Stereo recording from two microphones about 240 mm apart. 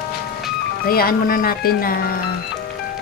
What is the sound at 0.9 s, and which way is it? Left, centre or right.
Speech, left.